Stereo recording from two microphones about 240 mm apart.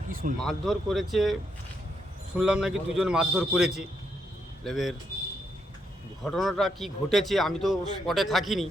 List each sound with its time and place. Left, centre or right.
0.1 s a sound: right
0.3 s a man's voice: centre
2.4 s a man's voice: centre
6.2 s a man's voice: centre